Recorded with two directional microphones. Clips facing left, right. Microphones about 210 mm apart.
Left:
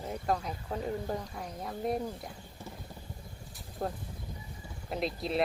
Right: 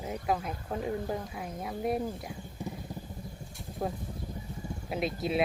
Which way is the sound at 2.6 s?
15° right (ahead or behind).